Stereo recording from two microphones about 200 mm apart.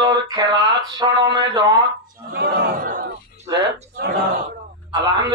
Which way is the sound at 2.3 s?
55° right (ahead or behind).